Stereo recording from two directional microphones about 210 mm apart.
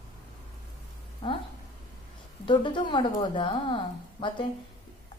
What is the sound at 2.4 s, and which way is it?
A woman's voice, 20° left (ahead or behind).